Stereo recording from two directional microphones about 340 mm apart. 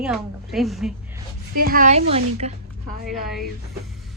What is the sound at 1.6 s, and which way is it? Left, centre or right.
Speech, right.